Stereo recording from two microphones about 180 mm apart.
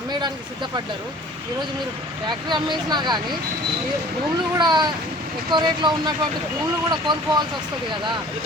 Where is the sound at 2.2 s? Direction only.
25° right (ahead or behind).